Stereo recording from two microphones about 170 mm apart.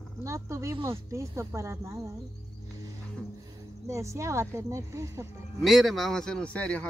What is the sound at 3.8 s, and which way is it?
Speech, 15° right (ahead or behind).